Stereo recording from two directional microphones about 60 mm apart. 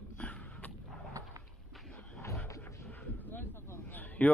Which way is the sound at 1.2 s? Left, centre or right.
Right.